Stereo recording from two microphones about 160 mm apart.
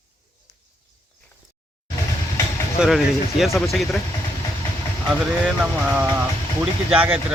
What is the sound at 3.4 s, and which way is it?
Speech, centre (ahead or behind).